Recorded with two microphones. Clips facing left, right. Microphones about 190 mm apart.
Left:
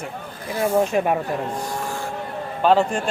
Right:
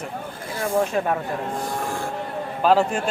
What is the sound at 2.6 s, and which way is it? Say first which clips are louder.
Speech: left 1 dB; 5° right (ahead or behind).